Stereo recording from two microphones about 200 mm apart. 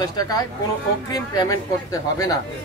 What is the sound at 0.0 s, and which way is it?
Speech, 20° left (ahead or behind).